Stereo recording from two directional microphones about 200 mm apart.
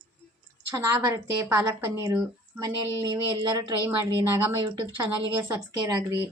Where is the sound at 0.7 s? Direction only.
15° right (ahead or behind).